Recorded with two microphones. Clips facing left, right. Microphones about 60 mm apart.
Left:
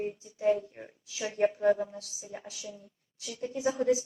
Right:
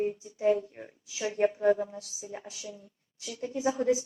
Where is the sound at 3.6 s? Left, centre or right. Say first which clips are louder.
Right 1 dB; centre.